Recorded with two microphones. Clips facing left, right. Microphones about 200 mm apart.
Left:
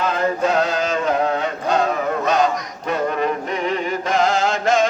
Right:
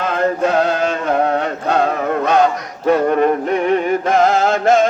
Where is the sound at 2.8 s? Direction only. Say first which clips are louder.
Right 8 dB; 50° right (ahead or behind).